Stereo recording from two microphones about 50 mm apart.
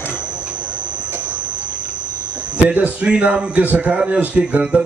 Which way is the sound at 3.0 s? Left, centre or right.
Right.